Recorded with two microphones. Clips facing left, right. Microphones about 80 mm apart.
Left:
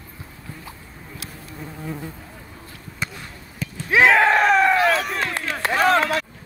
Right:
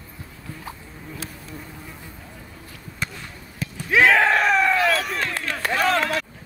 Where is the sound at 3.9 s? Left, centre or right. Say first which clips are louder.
Left 2 dB; left.